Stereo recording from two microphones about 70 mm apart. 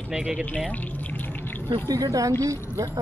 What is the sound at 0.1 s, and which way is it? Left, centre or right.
Speech, centre.